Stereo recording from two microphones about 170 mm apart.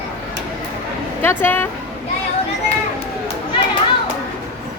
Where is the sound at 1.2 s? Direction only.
10° left (ahead or behind).